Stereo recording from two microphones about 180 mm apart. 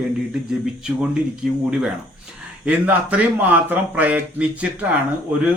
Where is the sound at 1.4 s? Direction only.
5° right (ahead or behind).